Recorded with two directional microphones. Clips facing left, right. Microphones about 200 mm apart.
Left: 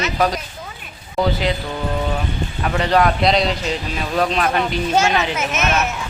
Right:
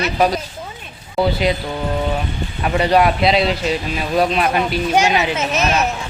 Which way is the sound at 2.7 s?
10° right (ahead or behind).